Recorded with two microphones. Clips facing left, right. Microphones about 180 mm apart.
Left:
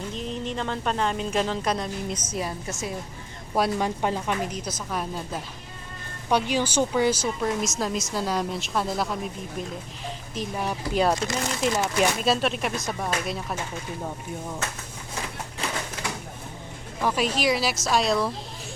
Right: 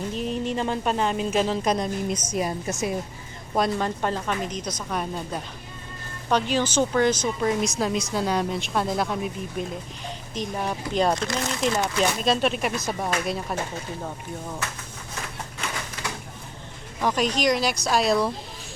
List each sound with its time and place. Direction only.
0.2 s speech: 10° right (ahead or behind)
1.6 s a woman's voice: 15° right (ahead or behind)
3.5 s speech: 10° left (ahead or behind)
17.0 s speech: 5° left (ahead or behind)